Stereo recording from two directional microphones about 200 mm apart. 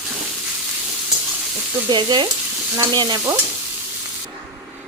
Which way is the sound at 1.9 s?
20° right (ahead or behind).